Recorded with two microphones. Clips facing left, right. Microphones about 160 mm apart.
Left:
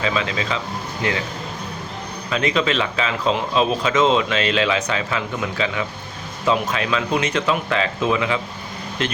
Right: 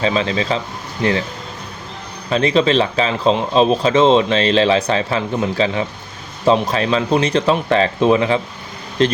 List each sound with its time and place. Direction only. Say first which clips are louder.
0.0 s speech: right 5 dB; 30° right (ahead or behind)
2.3 s speech: right 6 dB; 35° right (ahead or behind)